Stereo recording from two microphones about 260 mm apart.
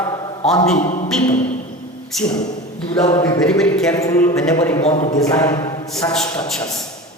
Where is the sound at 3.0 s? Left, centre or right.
Centre.